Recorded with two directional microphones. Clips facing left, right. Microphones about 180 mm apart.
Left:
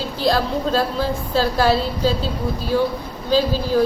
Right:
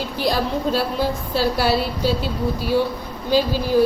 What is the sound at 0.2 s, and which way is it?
Speech, 15° right (ahead or behind).